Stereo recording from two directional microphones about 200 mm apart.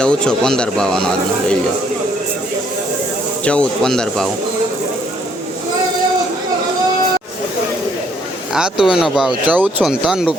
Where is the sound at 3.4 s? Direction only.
5° left (ahead or behind).